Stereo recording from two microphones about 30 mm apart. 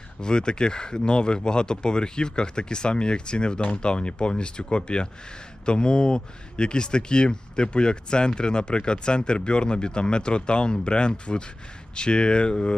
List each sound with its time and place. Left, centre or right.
0.2 s speech: left